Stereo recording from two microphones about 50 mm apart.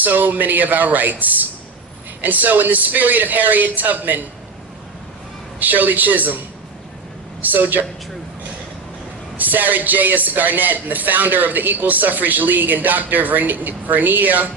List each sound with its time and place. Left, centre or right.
0.0 s a man's voice: right
5.5 s a man's voice: right
7.4 s a man's voice: right
9.4 s a man's voice: right